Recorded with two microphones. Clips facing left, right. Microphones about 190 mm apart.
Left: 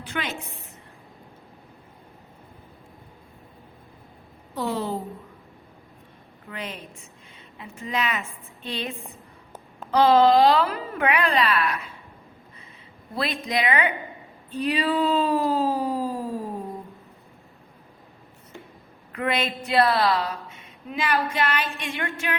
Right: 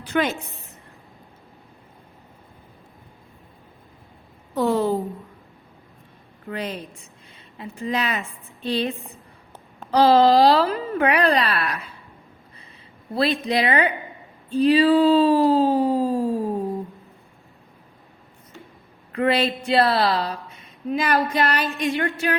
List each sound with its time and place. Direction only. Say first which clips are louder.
0.0 s a woman's voice: right 9 dB; 45° right (ahead or behind)
4.5 s a woman's voice: right 7 dB; 50° right (ahead or behind)
6.5 s speech: right 6 dB; 35° right (ahead or behind)
13.1 s speech: right 5 dB; 30° right (ahead or behind)
19.1 s speech: right 6 dB; 35° right (ahead or behind)